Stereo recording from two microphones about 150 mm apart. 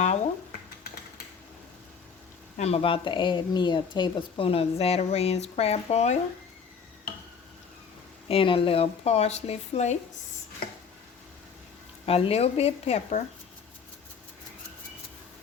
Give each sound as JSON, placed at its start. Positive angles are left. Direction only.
{"t": 2.6, "sound": "a woman's voice", "side_deg": 45}
{"t": 8.3, "sound": "speech", "side_deg": 35}
{"t": 12.0, "sound": "speech", "side_deg": 40}